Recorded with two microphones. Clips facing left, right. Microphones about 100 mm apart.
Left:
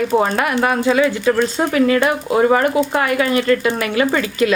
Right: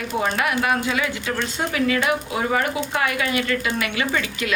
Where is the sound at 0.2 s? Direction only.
40° left (ahead or behind).